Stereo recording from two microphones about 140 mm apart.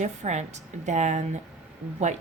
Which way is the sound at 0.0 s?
55° right (ahead or behind).